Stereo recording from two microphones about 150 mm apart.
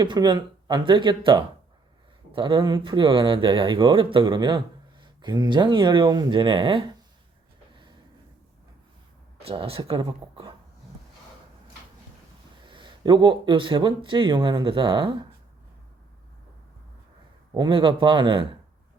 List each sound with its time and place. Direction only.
0.0 s speech: 30° right (ahead or behind)
9.4 s speech: 40° right (ahead or behind)
12.6 s speech: 30° right (ahead or behind)
17.5 s speech: 30° right (ahead or behind)